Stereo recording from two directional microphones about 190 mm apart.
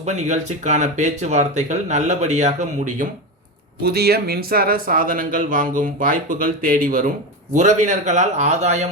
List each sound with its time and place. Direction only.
0.0 s speech: 35° right (ahead or behind)
3.8 s speech: 55° right (ahead or behind); by 8.9 s 35° right (ahead or behind)